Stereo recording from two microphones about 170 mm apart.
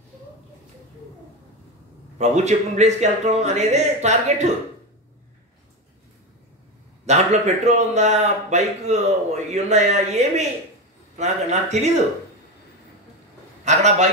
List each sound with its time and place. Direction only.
2.1 s a man's voice: 40° right (ahead or behind)
7.1 s a man's voice: 40° right (ahead or behind)
13.7 s a man's voice: 40° right (ahead or behind)